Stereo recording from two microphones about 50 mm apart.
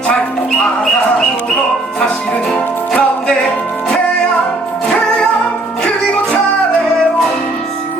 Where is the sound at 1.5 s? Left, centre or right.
Centre.